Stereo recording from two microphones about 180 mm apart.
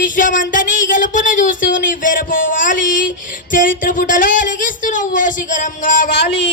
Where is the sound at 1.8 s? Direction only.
50° left (ahead or behind).